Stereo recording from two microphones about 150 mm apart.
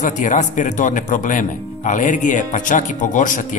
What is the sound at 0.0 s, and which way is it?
A man's voice, 55° left (ahead or behind).